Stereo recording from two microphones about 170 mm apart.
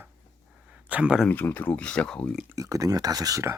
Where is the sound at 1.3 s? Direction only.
10° left (ahead or behind).